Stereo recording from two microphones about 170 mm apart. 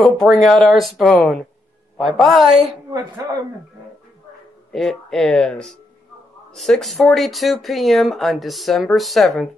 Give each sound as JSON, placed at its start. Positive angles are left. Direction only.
{"t": 0.0, "sound": "speech", "side_deg": 0}
{"t": 2.9, "sound": "speech", "side_deg": -20}
{"t": 4.7, "sound": "speech", "side_deg": 0}